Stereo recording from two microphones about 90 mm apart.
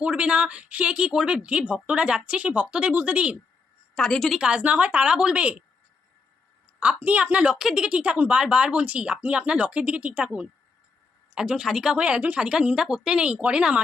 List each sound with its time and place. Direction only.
0.0 s speech: 15° right (ahead or behind)
3.9 s a woman's voice: 5° left (ahead or behind)
4.4 s speech: 15° right (ahead or behind)
6.7 s speech: 15° right (ahead or behind)